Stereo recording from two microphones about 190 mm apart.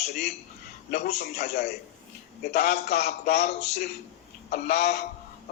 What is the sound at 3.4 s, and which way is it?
Speech, 35° left (ahead or behind).